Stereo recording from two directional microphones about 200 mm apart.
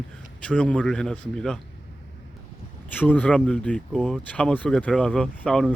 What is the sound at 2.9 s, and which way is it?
Speech, 10° left (ahead or behind).